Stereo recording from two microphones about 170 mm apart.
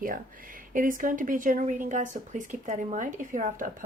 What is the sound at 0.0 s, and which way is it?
Speech, 55° right (ahead or behind).